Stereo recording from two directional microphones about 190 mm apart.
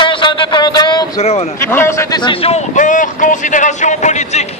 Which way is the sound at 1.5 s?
10° left (ahead or behind).